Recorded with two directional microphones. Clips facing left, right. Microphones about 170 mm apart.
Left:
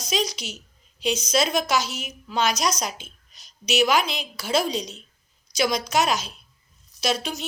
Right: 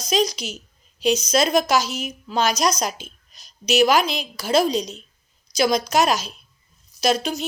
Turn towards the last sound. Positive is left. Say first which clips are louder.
# right 5 dB
turn(degrees=-40)  # may be behind; listen again after turning